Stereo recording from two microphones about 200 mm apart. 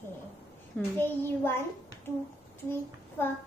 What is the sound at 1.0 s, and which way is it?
Speech, 10° left (ahead or behind).